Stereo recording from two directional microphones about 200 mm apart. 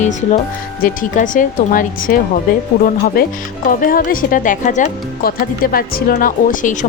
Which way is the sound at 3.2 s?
45° left (ahead or behind).